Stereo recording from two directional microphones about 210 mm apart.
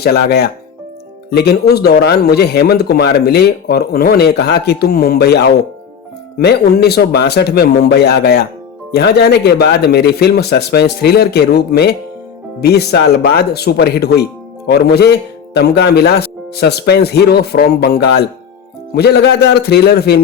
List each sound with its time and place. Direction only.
0.0 s speech: 50° left (ahead or behind)